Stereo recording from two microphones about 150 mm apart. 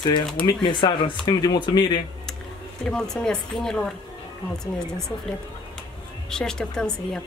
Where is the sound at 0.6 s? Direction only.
30° left (ahead or behind).